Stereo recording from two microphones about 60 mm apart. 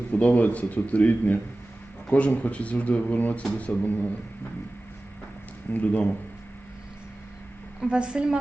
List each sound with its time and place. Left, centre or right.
0.1 s speech: left
5.7 s speech: left
7.8 s a woman's voice: centre